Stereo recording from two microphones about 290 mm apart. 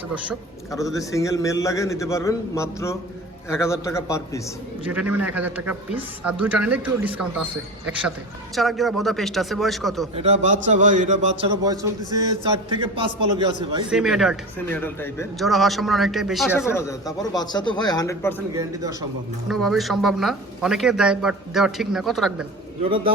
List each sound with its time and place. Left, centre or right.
0.7 s speech: centre
4.9 s speech: centre
8.5 s speech: centre
10.2 s a man's voice: right
11.6 s a man's voice: centre
13.9 s speech: centre
18.5 s a man's voice: centre
19.5 s speech: centre
22.8 s a man's voice: centre